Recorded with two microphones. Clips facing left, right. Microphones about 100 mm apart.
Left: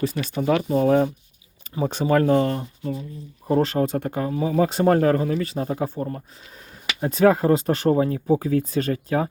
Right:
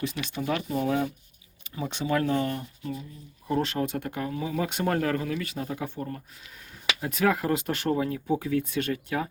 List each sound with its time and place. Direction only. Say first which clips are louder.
0.0 s speech: left 7 dB; 40° left (ahead or behind)
2.4 s speech: left 6 dB; 35° left (ahead or behind)